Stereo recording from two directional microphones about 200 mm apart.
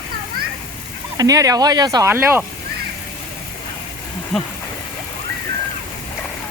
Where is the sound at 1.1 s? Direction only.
20° right (ahead or behind).